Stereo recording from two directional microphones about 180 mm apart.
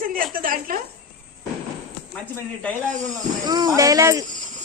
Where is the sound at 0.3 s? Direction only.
50° right (ahead or behind).